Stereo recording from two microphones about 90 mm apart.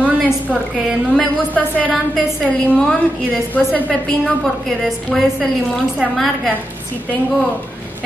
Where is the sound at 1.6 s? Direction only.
15° left (ahead or behind).